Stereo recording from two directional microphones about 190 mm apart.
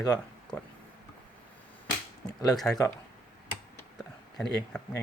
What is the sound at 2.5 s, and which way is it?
Speech, centre (ahead or behind).